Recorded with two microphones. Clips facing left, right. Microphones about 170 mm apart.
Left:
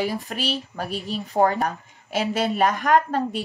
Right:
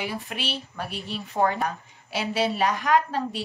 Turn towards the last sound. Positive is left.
turn(degrees=45)  # may be behind; listen again after turning